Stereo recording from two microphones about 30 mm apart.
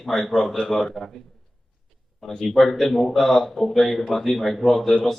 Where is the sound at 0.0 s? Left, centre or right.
Centre.